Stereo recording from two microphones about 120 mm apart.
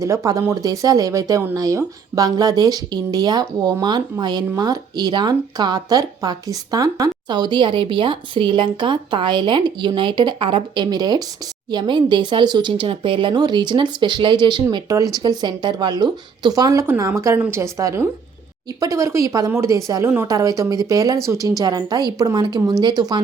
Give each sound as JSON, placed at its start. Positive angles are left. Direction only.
{"t": 0.0, "sound": "speech", "side_deg": -25}